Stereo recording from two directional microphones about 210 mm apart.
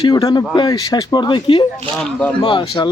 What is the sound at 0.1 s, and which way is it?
Speech, 20° left (ahead or behind).